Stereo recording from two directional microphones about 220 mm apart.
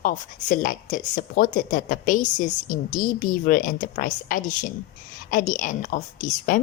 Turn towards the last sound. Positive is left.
turn(degrees=35)  # may be behind; listen again after turning